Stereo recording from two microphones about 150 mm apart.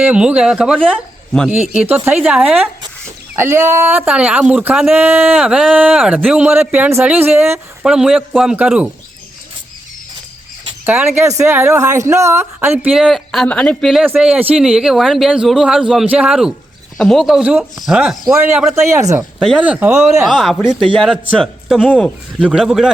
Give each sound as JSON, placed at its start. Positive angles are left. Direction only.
{"t": 0.0, "sound": "a man's voice", "side_deg": -5}
{"t": 3.3, "sound": "speech", "side_deg": -20}
{"t": 7.9, "sound": "a man's voice", "side_deg": -5}
{"t": 10.8, "sound": "speech", "side_deg": -10}
{"t": 12.9, "sound": "a man's voice", "side_deg": 0}
{"t": 14.0, "sound": "a man's voice", "side_deg": -10}
{"t": 18.9, "sound": "speech", "side_deg": -20}
{"t": 19.4, "sound": "a man's voice", "side_deg": -5}